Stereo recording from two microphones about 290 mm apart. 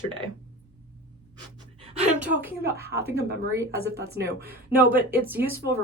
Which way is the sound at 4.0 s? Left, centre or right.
Right.